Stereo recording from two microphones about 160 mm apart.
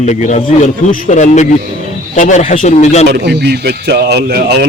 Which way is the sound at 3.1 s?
90° right.